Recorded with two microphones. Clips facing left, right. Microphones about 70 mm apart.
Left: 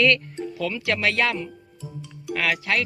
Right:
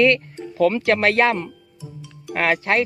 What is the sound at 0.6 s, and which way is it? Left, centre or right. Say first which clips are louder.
Speech: right 8 dB; right.